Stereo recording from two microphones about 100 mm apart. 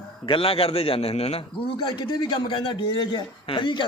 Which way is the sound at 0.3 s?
70° left (ahead or behind).